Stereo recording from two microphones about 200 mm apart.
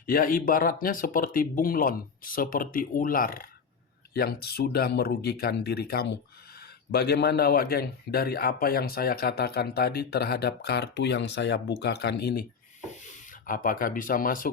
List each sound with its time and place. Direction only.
0.0 s a man's voice: 45° left (ahead or behind)
12.9 s speech: 40° left (ahead or behind)